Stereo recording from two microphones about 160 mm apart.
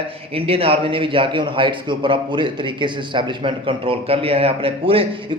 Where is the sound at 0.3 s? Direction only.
35° right (ahead or behind).